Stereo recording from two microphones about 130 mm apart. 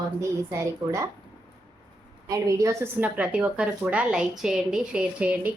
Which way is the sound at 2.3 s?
25° right (ahead or behind).